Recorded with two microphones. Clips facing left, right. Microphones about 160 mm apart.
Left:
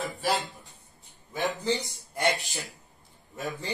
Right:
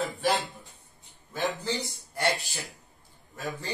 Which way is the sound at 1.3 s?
15° left (ahead or behind).